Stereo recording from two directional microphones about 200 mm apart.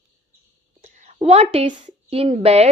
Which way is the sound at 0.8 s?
35° right (ahead or behind).